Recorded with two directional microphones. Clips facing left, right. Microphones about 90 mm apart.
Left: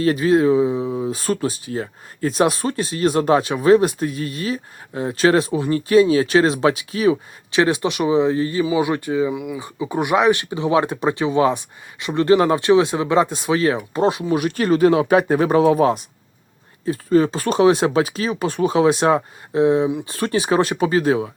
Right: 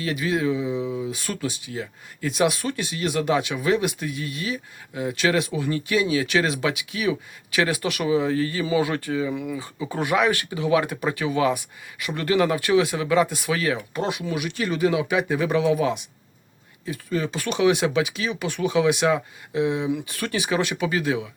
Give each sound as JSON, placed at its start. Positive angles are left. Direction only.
{"t": 0.0, "sound": "speech", "side_deg": 40}
{"t": 9.3, "sound": "speech", "side_deg": 10}